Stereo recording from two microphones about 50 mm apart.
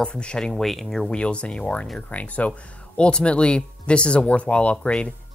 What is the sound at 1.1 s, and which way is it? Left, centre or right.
Speech, left.